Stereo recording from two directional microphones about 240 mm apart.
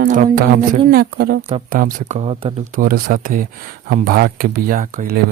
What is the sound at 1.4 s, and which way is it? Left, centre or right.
Speech, right.